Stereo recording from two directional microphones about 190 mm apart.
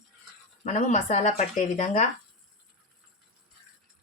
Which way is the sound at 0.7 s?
35° left (ahead or behind).